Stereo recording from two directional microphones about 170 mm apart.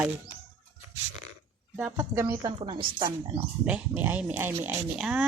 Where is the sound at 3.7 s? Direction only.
10° right (ahead or behind).